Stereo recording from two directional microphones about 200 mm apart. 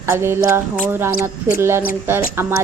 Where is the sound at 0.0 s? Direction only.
15° right (ahead or behind).